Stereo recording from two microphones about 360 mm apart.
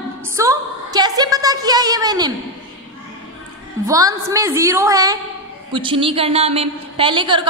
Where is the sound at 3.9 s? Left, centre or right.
Centre.